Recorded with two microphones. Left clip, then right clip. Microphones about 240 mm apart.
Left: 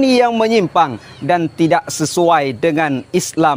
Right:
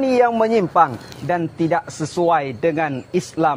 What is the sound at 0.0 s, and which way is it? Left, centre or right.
Speech, left.